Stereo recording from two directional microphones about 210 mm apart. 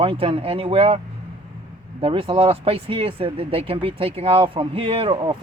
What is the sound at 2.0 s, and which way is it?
Speech, 25° right (ahead or behind).